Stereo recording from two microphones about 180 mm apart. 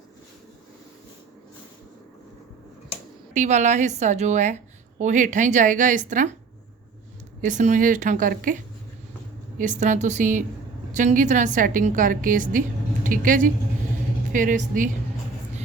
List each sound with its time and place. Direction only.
3.3 s a woman's voice: 40° right (ahead or behind)
7.4 s a woman's voice: 45° right (ahead or behind)